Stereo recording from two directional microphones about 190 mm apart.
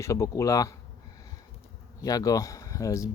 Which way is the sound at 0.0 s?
15° left (ahead or behind).